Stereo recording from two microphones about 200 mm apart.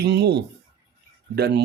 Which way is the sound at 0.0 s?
55° right (ahead or behind).